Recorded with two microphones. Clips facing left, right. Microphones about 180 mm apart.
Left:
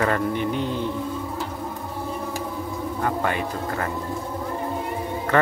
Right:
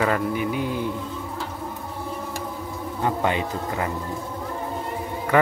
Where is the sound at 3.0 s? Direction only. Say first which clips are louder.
Right 2 dB; 20° right (ahead or behind).